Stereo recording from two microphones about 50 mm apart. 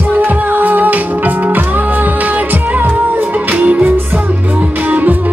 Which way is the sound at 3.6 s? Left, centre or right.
Right.